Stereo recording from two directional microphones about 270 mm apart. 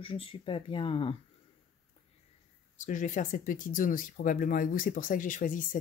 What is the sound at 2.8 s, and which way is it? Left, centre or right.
Speech, left.